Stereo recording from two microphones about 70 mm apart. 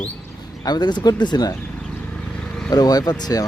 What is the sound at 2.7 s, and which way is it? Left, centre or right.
Speech, left.